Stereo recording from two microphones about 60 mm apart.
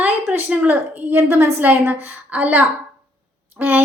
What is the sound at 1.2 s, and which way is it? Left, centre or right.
Speech, right.